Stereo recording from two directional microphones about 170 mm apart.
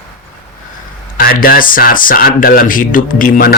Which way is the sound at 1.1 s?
60° left (ahead or behind).